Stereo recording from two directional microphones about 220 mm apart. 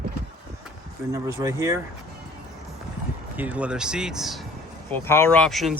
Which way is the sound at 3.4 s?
5° right (ahead or behind).